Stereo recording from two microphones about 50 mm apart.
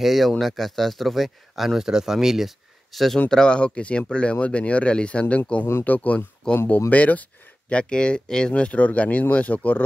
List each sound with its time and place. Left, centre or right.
0.0 s speech: centre
3.3 s speech: centre; by 6.2 s left
6.4 s speech: centre
6.9 s speech: left
7.7 s speech: centre